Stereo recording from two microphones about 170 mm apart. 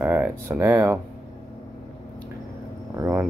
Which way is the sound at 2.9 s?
15° right (ahead or behind).